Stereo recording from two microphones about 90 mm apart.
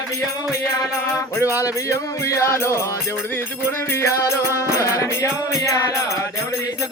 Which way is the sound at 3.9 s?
35° left (ahead or behind).